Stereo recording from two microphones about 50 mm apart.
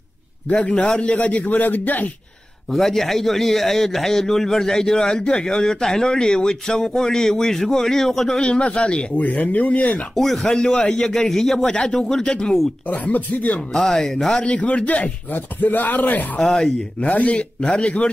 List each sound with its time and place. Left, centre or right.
0.5 s speech: left
2.7 s a man's voice: centre
8.4 s speech: left
10.1 s speech: centre
10.5 s a man's voice: centre
12.8 s speech: left
13.7 s a man's voice: centre
14.4 s speech: left
16.3 s a man's voice: centre
17.0 s speech: left